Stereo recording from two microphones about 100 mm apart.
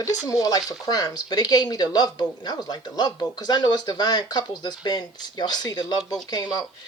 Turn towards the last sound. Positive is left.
turn(degrees=40)  # may be behind; listen again after turning